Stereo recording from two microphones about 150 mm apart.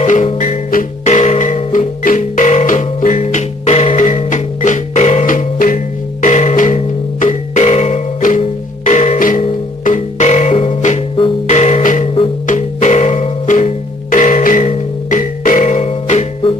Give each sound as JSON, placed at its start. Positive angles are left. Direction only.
{"t": 0.0, "sound": "music", "side_deg": 55}
{"t": 1.0, "sound": "music", "side_deg": 45}
{"t": 6.2, "sound": "music", "side_deg": 50}
{"t": 14.4, "sound": "music", "side_deg": 65}